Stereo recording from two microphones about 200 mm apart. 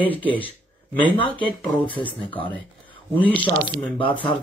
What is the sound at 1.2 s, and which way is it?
Speech, 25° left (ahead or behind).